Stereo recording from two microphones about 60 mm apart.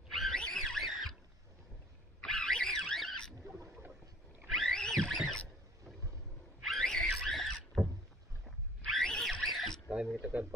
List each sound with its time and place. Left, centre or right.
0.1 s wild animals: centre
0.4 s a sound: centre
2.2 s pig: centre
4.5 s music: centre
6.6 s wild animals: centre
9.8 s a sound: centre